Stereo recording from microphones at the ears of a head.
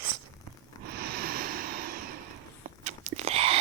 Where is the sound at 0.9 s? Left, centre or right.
Right.